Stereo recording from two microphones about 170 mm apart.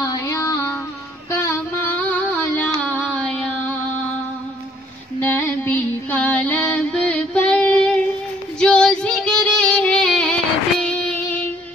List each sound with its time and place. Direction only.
0.1 s female singing: 20° left (ahead or behind)
1.3 s a sound: 15° left (ahead or behind)
2.8 s music: 10° left (ahead or behind)
5.2 s music: 10° left (ahead or behind)
10.8 s child singing: 10° left (ahead or behind)